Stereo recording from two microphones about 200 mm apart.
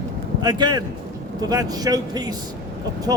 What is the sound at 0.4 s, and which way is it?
Speech, 20° right (ahead or behind).